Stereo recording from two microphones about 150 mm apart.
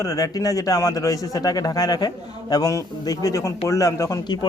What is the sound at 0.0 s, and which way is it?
A man's voice, 25° left (ahead or behind).